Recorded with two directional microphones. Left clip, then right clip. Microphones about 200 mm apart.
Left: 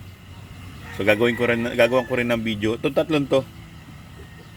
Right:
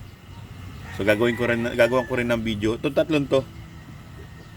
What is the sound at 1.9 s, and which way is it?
Speech, 20° left (ahead or behind).